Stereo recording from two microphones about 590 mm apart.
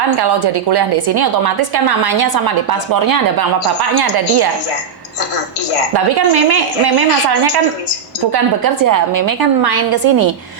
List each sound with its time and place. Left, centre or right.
0.2 s a woman's voice: right
6.1 s a woman's voice: right